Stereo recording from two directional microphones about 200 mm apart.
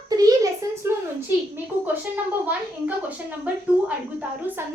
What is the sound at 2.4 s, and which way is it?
Speech, 10° right (ahead or behind).